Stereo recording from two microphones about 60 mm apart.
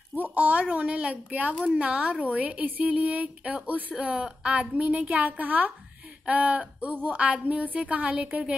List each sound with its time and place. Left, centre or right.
0.1 s a woman's voice: right